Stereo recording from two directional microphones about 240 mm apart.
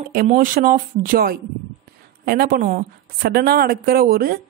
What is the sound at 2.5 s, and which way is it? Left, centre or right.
Speech, right.